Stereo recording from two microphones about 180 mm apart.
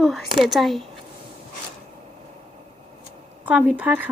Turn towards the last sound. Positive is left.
turn(degrees=-10)  # may be behind; listen again after turning